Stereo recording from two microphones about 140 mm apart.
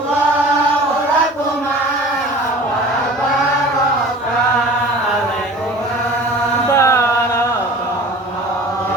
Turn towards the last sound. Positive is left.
turn(degrees=20)  # may be behind; listen again after turning